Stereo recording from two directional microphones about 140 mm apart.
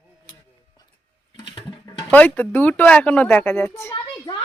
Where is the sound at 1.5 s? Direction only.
35° left (ahead or behind).